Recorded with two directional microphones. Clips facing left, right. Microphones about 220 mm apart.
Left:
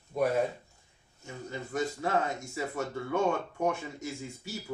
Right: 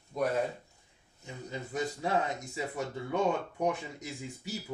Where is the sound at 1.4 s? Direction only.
20° right (ahead or behind).